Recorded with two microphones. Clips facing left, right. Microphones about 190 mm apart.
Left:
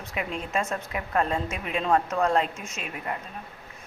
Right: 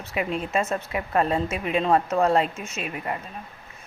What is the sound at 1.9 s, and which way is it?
Speech, 15° right (ahead or behind).